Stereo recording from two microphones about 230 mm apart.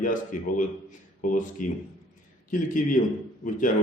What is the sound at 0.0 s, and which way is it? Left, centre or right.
Speech, left.